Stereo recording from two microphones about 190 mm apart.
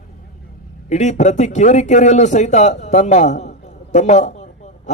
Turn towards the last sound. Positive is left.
turn(degrees=40)  # may be behind; listen again after turning